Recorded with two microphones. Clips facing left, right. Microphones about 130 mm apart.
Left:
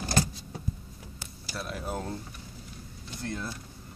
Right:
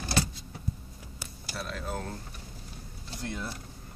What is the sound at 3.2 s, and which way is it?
Speech, 15° right (ahead or behind).